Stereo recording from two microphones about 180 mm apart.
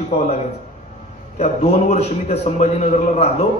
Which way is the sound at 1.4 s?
40° left (ahead or behind).